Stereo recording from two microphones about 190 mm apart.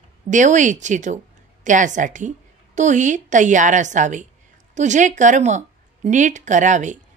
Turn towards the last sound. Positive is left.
turn(degrees=-40)  # may be behind; listen again after turning